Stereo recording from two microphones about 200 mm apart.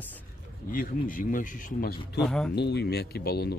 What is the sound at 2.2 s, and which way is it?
Speech, 5° left (ahead or behind).